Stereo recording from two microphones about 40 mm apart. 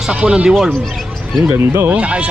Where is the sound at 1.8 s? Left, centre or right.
Right.